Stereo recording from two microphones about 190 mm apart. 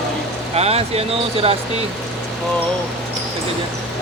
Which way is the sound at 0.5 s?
35° right (ahead or behind).